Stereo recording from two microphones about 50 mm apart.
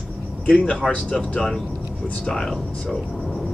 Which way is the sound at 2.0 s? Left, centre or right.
Left.